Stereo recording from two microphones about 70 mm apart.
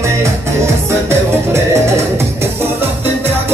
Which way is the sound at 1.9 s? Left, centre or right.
Right.